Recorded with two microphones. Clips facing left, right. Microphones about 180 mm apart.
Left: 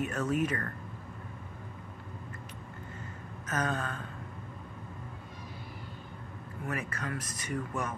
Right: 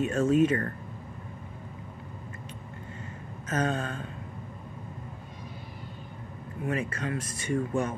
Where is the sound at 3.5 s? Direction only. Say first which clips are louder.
Right 4 dB; 30° right (ahead or behind).